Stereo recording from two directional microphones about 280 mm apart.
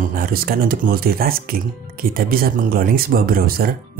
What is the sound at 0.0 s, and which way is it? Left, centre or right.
Speech, right.